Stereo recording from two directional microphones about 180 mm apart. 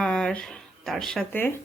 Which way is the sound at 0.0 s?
5° left (ahead or behind).